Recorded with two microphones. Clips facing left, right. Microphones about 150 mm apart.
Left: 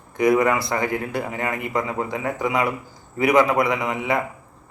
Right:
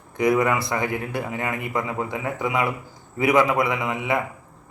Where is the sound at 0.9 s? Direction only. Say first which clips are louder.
Left 2 dB; 20° left (ahead or behind).